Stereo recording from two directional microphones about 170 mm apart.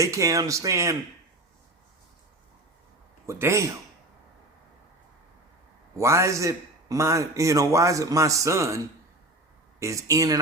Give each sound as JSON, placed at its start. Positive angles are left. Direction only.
{"t": 0.0, "sound": "speech", "side_deg": -20}
{"t": 3.2, "sound": "a man's voice", "side_deg": -15}
{"t": 6.0, "sound": "a man's voice", "side_deg": -15}
{"t": 9.8, "sound": "speech", "side_deg": -20}